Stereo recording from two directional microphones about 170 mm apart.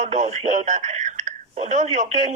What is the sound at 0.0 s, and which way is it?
A man's voice, 45° right (ahead or behind).